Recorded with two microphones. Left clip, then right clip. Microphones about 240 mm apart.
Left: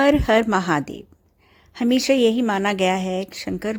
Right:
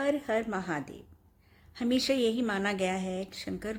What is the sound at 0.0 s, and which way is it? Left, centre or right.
A woman's voice, left.